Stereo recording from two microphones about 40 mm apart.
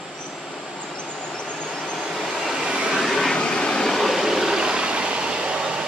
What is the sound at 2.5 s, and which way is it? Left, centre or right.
Vehicle, right.